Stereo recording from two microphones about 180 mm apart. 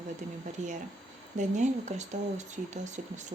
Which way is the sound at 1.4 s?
40° right (ahead or behind).